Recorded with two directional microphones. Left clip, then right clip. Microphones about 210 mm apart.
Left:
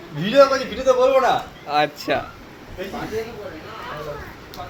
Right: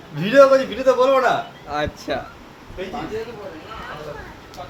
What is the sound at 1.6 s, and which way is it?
Speech, 5° right (ahead or behind).